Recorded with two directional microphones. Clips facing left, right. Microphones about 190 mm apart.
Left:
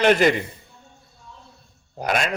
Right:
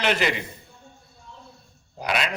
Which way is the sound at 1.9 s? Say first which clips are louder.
Left 3 dB; 45° left (ahead or behind).